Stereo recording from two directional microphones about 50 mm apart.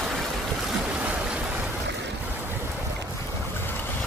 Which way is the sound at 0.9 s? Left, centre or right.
Right.